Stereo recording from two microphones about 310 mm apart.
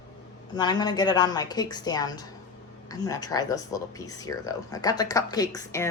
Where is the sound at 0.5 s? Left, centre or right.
Centre.